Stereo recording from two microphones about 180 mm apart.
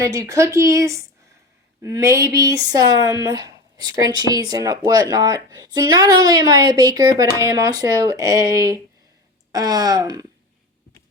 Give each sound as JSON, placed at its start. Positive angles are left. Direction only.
{"t": 0.0, "sound": "speech", "side_deg": -15}